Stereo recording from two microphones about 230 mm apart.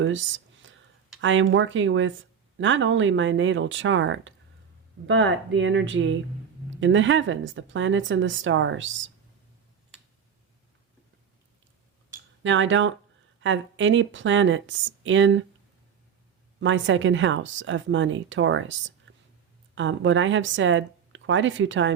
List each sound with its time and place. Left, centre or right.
0.0 s a sound: right
1.2 s speech: right
12.4 s speech: right
16.6 s speech: right